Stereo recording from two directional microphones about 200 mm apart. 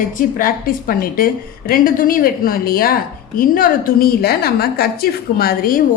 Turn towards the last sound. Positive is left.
turn(degrees=45)  # may be behind; listen again after turning